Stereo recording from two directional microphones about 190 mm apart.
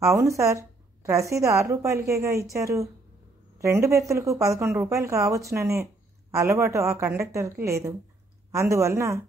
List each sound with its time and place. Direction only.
0.0 s a woman's voice: 15° right (ahead or behind)